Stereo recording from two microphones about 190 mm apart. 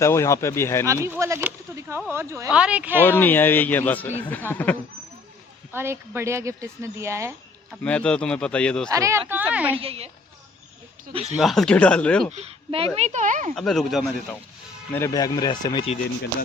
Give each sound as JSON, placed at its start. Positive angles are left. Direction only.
{"t": 0.0, "sound": "speech", "side_deg": 15}
{"t": 1.0, "sound": "speech", "side_deg": -15}
{"t": 3.0, "sound": "speech", "side_deg": 10}
{"t": 5.7, "sound": "speech", "side_deg": -10}
{"t": 7.7, "sound": "a man's voice", "side_deg": 5}
{"t": 8.9, "sound": "speech", "side_deg": -15}
{"t": 9.7, "sound": "speech", "side_deg": -30}
{"t": 11.1, "sound": "speech", "side_deg": -35}
{"t": 11.3, "sound": "a man's voice", "side_deg": 0}
{"t": 12.3, "sound": "speech", "side_deg": -35}
{"t": 13.5, "sound": "a man's voice", "side_deg": 0}
{"t": 14.9, "sound": "speech", "side_deg": 15}